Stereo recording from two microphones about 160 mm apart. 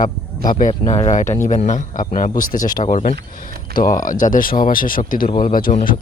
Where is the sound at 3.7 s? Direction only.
60° left (ahead or behind).